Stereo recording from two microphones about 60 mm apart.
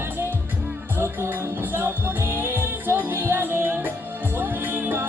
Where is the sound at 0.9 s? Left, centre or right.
Right.